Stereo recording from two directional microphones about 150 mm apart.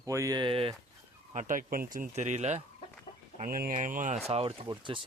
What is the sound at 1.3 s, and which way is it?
Speech, 60° right (ahead or behind).